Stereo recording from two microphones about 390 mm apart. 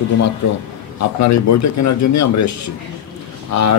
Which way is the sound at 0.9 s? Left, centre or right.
Left.